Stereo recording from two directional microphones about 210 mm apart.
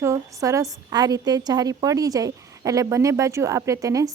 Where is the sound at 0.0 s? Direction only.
15° right (ahead or behind).